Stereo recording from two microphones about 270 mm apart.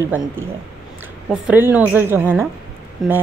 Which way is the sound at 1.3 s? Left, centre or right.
Centre.